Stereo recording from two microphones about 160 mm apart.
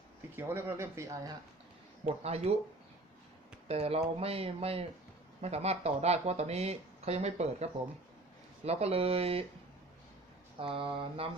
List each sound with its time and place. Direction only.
0.3 s speech: 15° right (ahead or behind)
2.0 s speech: 40° right (ahead or behind)
3.7 s speech: 40° right (ahead or behind)
10.6 s speech: 35° right (ahead or behind)